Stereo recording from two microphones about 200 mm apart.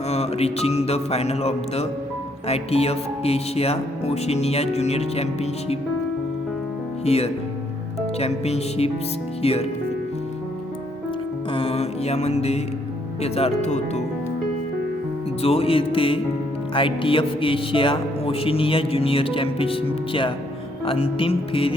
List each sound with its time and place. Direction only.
0.1 s speech: 30° left (ahead or behind)
7.0 s speech: 30° left (ahead or behind)
11.5 s mantra: 30° left (ahead or behind)
13.2 s speech: 30° left (ahead or behind)
15.4 s speech: 30° left (ahead or behind)